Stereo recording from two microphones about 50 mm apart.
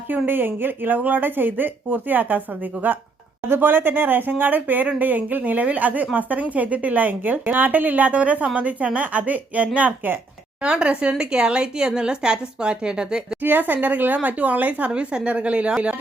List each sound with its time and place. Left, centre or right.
0.3 s speech: right
10.6 s a woman's voice: right
13.4 s speech: right
14.8 s a woman's voice: right